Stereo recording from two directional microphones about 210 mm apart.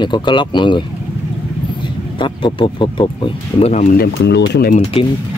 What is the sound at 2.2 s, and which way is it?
Speech, 25° left (ahead or behind).